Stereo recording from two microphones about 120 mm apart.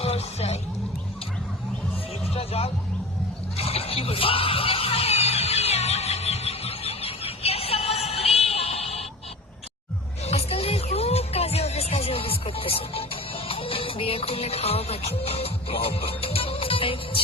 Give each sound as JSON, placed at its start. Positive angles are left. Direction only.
{"t": 0.0, "sound": "music", "side_deg": 60}
{"t": 2.3, "sound": "music", "side_deg": 55}
{"t": 10.2, "sound": "music", "side_deg": 60}